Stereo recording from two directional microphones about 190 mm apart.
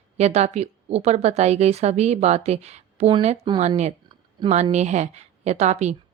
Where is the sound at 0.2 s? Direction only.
35° right (ahead or behind).